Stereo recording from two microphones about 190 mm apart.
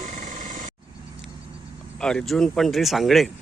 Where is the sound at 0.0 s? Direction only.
40° right (ahead or behind).